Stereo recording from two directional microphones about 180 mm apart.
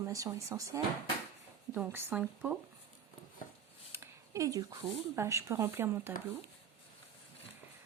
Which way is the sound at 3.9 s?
15° right (ahead or behind).